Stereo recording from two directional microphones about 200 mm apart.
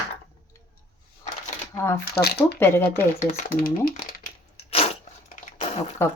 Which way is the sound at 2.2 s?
50° left (ahead or behind).